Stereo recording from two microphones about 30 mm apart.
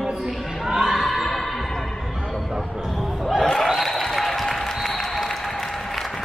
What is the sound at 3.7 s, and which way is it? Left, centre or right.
Applause, centre.